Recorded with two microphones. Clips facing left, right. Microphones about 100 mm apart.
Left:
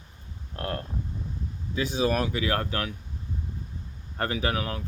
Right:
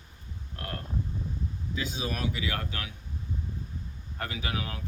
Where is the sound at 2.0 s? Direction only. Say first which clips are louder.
Left 8 dB; 50° left (ahead or behind).